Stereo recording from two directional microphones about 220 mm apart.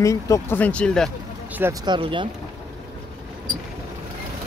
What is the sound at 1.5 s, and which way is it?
Vehicle, 10° right (ahead or behind).